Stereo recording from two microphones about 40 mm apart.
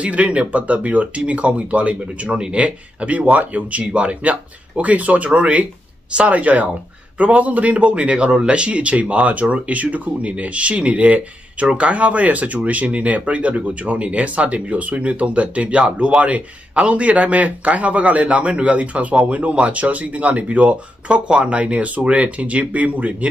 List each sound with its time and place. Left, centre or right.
0.0 s a man's voice: right